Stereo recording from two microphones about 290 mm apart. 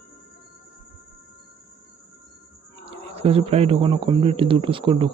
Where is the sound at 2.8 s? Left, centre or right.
Centre.